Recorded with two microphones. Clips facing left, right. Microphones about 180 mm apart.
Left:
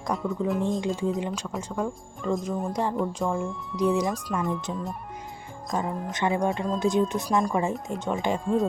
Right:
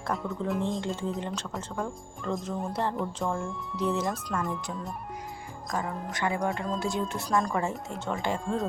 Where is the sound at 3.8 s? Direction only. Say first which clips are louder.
Left 5 dB; 15° left (ahead or behind).